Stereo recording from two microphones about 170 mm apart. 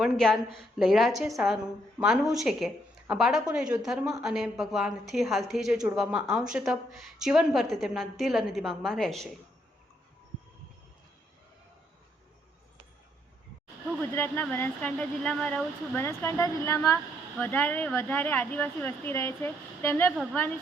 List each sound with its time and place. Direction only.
0.0 s a woman's voice: centre (ahead or behind)
14.0 s speech: 10° left (ahead or behind)
16.0 s speech: 15° left (ahead or behind)